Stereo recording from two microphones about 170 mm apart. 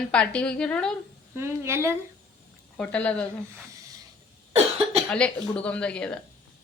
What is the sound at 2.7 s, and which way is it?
Speech, 5° left (ahead or behind).